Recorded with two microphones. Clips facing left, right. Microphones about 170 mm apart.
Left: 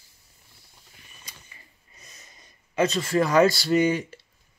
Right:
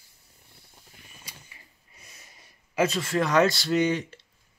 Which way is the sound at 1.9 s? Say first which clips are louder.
Left 1 dB; 10° right (ahead or behind).